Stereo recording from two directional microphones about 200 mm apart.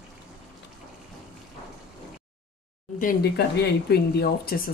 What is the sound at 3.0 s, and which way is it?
Speech, 50° left (ahead or behind).